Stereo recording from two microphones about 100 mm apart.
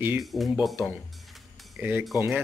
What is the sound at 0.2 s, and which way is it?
Speech, centre (ahead or behind).